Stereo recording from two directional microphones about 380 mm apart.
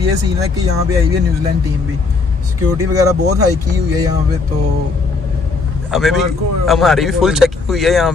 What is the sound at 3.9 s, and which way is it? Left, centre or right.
Speech, centre.